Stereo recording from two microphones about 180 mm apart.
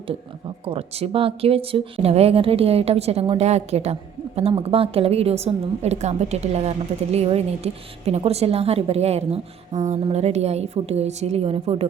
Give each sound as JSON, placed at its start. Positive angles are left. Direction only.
{"t": 0.6, "sound": "a woman's voice", "side_deg": -30}